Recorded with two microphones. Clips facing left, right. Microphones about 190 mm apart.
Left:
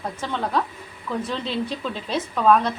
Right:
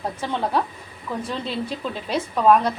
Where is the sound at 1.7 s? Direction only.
10° right (ahead or behind).